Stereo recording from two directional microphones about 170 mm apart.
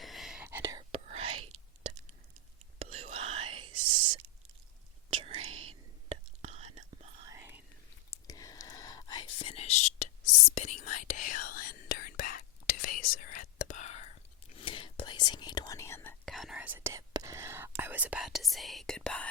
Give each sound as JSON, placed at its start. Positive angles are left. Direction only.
{"t": 0.0, "sound": "whispering", "side_deg": 0}
{"t": 0.4, "sound": "whispering", "side_deg": -15}
{"t": 0.9, "sound": "whispering", "side_deg": -35}
{"t": 2.7, "sound": "whispering", "side_deg": -35}
{"t": 5.1, "sound": "whispering", "side_deg": -35}
{"t": 7.3, "sound": "whispering", "side_deg": -15}
{"t": 8.1, "sound": "whispering", "side_deg": 20}
{"t": 14.5, "sound": "whispering", "side_deg": 30}
{"t": 16.2, "sound": "whispering", "side_deg": 0}